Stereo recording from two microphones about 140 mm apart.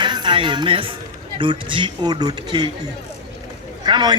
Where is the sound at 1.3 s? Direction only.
35° right (ahead or behind).